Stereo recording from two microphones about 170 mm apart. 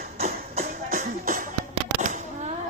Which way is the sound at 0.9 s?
55° right (ahead or behind).